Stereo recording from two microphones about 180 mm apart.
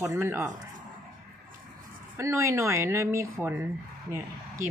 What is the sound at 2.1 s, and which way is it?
Speech, 15° right (ahead or behind).